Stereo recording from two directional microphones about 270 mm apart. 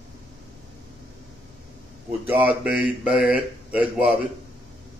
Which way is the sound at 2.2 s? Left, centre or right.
Centre.